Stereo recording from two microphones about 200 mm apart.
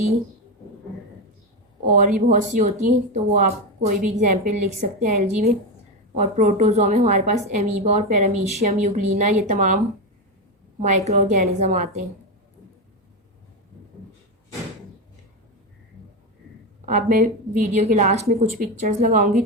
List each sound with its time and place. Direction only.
1.8 s a woman's voice: 40° right (ahead or behind)
16.8 s a woman's voice: 40° right (ahead or behind)